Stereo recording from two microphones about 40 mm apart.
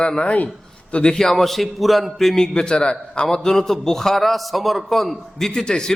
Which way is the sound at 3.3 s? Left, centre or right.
Centre.